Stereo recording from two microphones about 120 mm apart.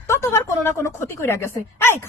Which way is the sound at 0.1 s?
25° left (ahead or behind).